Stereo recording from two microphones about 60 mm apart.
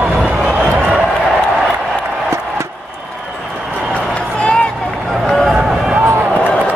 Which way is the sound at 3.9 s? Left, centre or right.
Centre.